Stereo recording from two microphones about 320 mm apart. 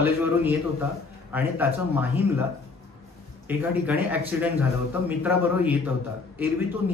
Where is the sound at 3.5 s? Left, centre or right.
Centre.